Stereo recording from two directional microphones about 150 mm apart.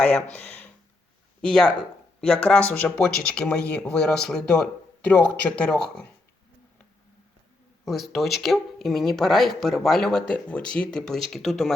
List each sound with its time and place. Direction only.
0.0 s speech: 10° left (ahead or behind)
7.9 s speech: centre (ahead or behind)